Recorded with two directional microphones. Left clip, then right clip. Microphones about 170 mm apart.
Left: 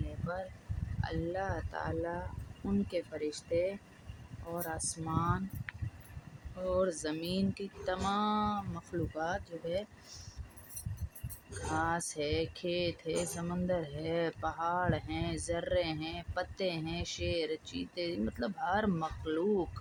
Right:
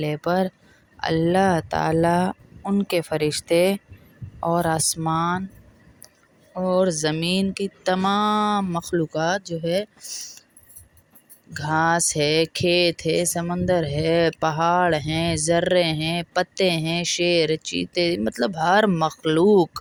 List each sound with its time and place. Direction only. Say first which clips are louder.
0.3 s speech: right 16 dB; 65° right (ahead or behind)
2.8 s speech: right 17 dB; 60° right (ahead or behind)
6.7 s speech: right 12 dB; 55° right (ahead or behind)
10.1 s speech: right 17 dB; 40° right (ahead or behind)
11.7 s speech: right 14 dB; 60° right (ahead or behind)